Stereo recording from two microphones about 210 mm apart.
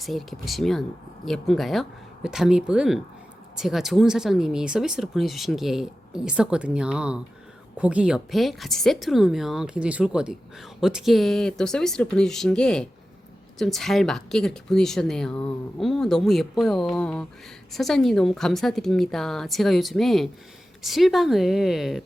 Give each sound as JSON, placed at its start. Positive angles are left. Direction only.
{"t": 0.0, "sound": "a woman's voice", "side_deg": 0}